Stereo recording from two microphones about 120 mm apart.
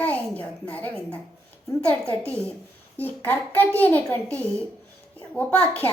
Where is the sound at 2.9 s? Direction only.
15° left (ahead or behind).